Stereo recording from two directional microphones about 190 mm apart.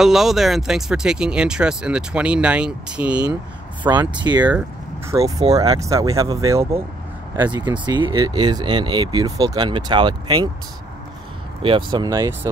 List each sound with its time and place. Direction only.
0.0 s speech: centre (ahead or behind)
4.1 s speech: 25° right (ahead or behind)
4.5 s speech: 10° right (ahead or behind)
11.6 s speech: 25° right (ahead or behind)